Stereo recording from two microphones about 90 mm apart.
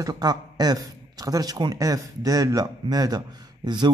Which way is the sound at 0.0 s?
50° right (ahead or behind).